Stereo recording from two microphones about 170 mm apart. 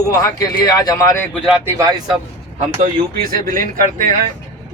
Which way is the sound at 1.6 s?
20° right (ahead or behind).